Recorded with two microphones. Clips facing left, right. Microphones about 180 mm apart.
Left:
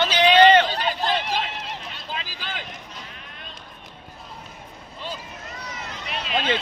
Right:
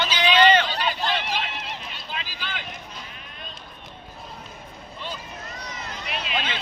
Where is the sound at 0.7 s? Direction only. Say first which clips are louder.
Left 2 dB; 45° left (ahead or behind).